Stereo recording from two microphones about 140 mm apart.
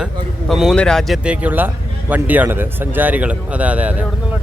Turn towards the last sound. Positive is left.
turn(degrees=-10)  # may be behind; listen again after turning